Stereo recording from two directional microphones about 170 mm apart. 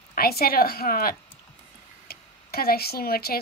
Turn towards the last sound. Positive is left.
turn(degrees=65)  # may be behind; listen again after turning